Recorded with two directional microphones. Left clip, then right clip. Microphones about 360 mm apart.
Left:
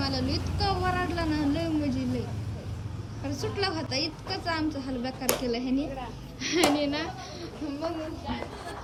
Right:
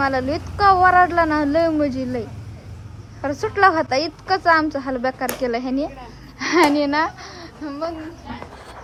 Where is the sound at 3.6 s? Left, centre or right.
Centre.